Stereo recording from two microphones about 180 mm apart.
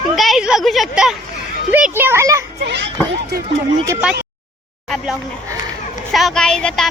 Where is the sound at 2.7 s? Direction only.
75° right (ahead or behind).